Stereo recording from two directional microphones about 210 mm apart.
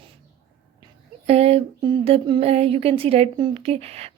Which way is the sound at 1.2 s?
30° right (ahead or behind).